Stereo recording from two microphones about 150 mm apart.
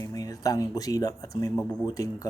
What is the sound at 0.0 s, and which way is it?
Speech, 25° left (ahead or behind).